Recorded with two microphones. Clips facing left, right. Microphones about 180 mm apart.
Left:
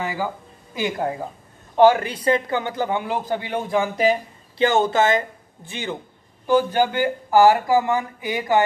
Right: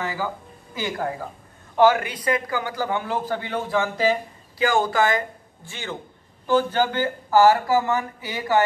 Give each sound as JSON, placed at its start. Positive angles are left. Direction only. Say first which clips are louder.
{"t": 0.0, "sound": "a man's voice", "louder": "left 2 dB", "side_deg": 15}